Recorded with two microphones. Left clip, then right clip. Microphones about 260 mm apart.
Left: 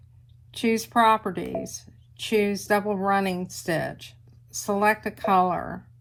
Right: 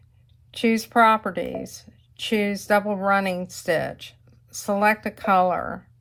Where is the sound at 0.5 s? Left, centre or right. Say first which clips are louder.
Right 2 dB; right.